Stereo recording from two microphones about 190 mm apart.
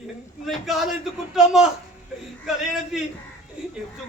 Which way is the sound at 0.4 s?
Centre (ahead or behind).